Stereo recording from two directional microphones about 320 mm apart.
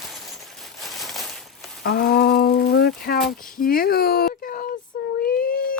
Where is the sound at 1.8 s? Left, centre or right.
Left.